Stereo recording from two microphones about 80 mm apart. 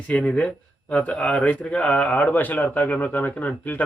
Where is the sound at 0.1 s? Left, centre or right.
Centre.